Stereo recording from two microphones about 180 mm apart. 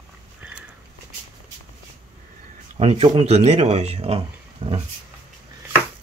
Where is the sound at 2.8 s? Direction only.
35° right (ahead or behind).